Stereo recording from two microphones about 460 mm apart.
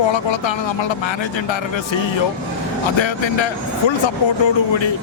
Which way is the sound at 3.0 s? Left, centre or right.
Left.